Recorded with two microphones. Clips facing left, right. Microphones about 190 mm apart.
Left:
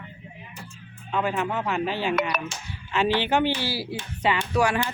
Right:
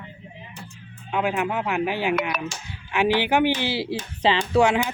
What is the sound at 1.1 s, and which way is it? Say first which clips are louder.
Speech: right 2 dB; 15° right (ahead or behind).